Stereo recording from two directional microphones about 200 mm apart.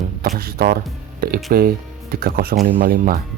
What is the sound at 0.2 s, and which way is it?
Speech, 50° right (ahead or behind).